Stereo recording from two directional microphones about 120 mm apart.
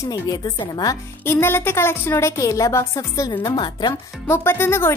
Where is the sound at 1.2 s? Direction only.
20° left (ahead or behind).